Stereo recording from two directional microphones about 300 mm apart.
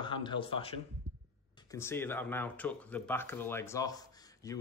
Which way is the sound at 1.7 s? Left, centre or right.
Centre.